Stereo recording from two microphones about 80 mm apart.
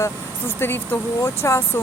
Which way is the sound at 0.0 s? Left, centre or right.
Left.